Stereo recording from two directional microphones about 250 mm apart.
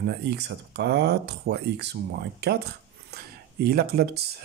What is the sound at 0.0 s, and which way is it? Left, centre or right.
Speech, right.